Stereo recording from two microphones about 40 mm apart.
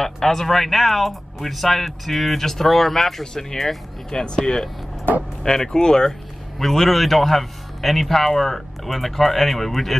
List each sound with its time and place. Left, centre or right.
0.0 s speech: centre
6.6 s speech: centre